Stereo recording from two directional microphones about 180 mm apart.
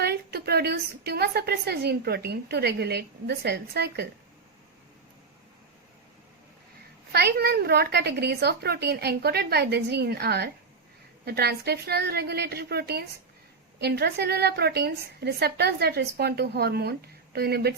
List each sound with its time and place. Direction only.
0.0 s a woman's voice: 65° right (ahead or behind)
7.1 s a woman's voice: 65° right (ahead or behind)